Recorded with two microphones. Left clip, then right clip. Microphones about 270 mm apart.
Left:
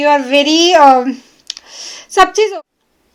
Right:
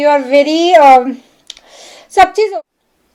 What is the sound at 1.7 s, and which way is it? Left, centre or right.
Clicking, centre.